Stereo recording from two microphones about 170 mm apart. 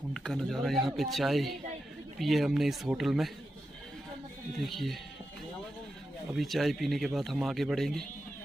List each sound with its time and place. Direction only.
0.1 s speech: 5° left (ahead or behind)
4.6 s speech: centre (ahead or behind)
6.3 s speech: centre (ahead or behind)